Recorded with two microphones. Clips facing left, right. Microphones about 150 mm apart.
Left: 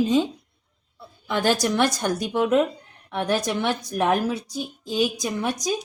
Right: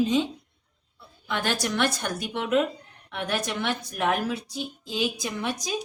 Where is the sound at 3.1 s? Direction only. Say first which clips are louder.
Left 5 dB; 40° left (ahead or behind).